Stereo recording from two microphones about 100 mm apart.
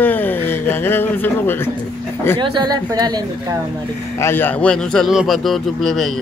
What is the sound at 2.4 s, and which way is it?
Speech, 45° right (ahead or behind).